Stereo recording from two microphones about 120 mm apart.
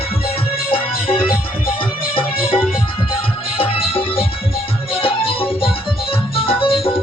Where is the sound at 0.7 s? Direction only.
50° left (ahead or behind).